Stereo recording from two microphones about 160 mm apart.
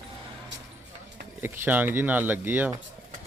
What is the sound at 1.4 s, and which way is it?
Speech, 10° right (ahead or behind).